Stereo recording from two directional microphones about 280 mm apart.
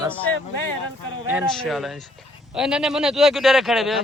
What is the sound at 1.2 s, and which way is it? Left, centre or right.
Speech, centre.